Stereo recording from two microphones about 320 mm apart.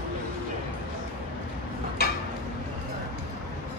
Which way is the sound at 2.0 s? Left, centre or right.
Left.